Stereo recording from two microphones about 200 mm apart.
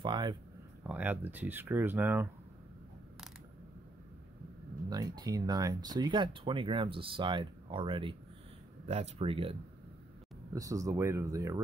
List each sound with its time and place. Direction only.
0.0 s a sound: 25° right (ahead or behind)
0.8 s speech: 10° right (ahead or behind)
4.8 s speech: 20° right (ahead or behind)
10.5 s speech: 15° right (ahead or behind)